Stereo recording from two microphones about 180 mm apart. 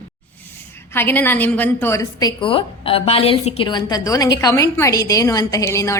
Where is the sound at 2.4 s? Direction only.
30° left (ahead or behind).